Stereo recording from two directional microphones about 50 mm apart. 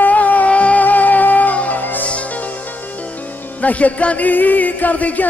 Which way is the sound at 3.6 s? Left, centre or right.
Left.